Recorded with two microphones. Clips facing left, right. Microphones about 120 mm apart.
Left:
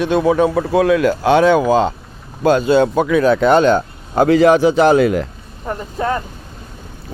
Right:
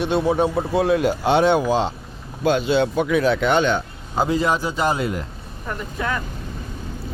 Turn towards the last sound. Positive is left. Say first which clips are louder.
# left 6 dB
turn(degrees=35)  # may be behind; listen again after turning